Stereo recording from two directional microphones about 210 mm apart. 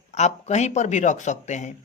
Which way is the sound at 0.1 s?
30° left (ahead or behind).